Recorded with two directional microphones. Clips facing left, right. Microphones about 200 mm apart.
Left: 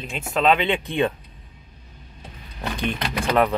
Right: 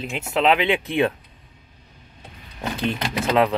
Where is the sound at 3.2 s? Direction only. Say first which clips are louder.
Right 1 dB; 15° right (ahead or behind).